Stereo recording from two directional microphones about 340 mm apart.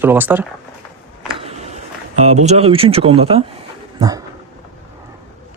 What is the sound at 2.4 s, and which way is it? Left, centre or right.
Speech, centre.